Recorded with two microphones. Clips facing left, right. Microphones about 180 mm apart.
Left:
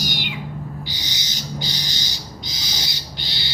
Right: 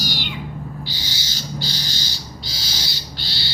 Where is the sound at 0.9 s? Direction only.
20° left (ahead or behind).